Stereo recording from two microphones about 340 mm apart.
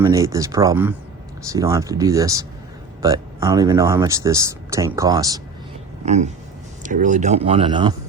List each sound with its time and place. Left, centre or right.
0.0 s speech: centre